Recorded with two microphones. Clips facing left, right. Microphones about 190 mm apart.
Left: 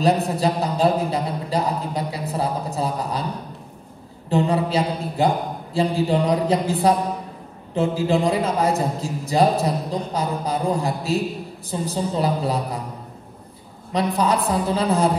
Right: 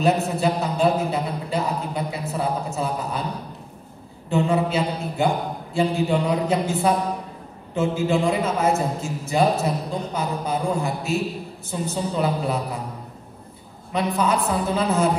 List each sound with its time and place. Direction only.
0.0 s a man's voice: 35° left (ahead or behind)
2.0 s a sound: 35° left (ahead or behind)
4.3 s a man's voice: 35° left (ahead or behind)
13.9 s a man's voice: 35° left (ahead or behind)